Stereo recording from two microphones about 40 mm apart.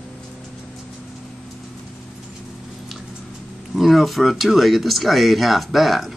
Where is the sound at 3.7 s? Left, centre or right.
Centre.